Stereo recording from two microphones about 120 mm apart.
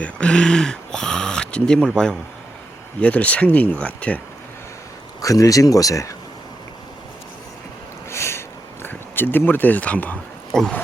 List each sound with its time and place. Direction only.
0.0 s speech: 5° left (ahead or behind)
5.2 s speech: 30° left (ahead or behind)
8.1 s a sound: 20° left (ahead or behind)